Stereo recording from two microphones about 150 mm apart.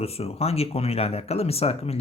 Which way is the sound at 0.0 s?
40° left (ahead or behind).